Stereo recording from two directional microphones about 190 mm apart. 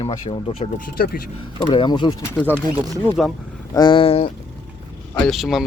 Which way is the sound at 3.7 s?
25° left (ahead or behind).